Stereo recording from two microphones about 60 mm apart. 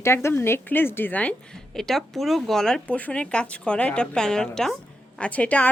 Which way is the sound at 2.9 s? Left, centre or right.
Left.